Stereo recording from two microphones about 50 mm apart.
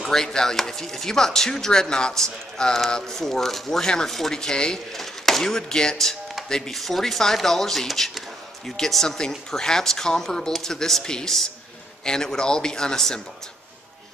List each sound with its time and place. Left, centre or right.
0.0 s speech: centre